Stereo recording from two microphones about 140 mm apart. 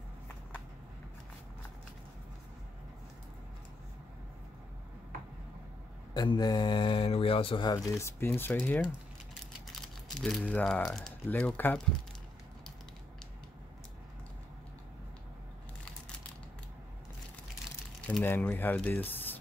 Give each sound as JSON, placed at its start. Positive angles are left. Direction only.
{"t": 6.1, "sound": "speech", "side_deg": 30}
{"t": 8.0, "sound": "speech", "side_deg": 15}
{"t": 18.0, "sound": "speech", "side_deg": 10}